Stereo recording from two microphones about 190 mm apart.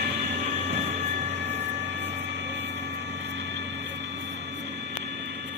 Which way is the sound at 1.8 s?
65° right (ahead or behind).